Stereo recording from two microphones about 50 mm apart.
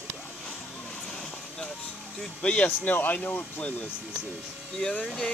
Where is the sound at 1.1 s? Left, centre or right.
Centre.